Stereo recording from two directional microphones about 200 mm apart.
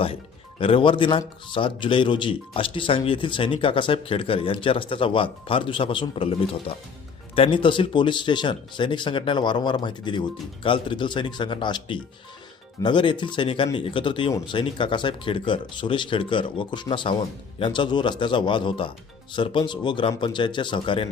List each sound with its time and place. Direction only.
0.6 s speech: 25° left (ahead or behind)